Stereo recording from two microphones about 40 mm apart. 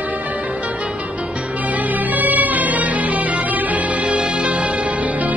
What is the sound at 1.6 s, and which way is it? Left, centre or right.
Music, right.